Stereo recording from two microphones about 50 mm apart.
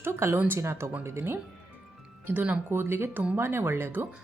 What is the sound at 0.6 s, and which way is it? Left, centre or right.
Speech, right.